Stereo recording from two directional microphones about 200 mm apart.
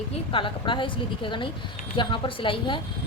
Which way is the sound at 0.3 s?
25° left (ahead or behind).